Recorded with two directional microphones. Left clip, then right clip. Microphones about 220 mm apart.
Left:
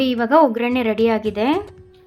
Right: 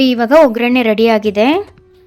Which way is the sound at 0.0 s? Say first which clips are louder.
Right 6 dB; 40° right (ahead or behind).